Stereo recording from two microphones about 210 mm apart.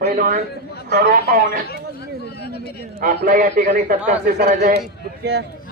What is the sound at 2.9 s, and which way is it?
A man's voice, 40° right (ahead or behind).